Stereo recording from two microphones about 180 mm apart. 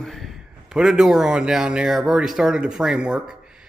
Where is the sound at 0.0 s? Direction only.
Centre (ahead or behind).